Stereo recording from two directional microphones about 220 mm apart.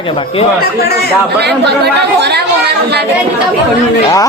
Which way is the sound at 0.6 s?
45° left (ahead or behind).